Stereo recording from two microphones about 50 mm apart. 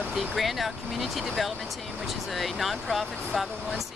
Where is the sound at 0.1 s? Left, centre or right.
Centre.